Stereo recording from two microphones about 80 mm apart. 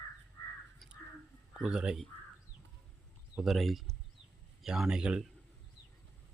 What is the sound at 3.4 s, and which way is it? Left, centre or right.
Speech, centre.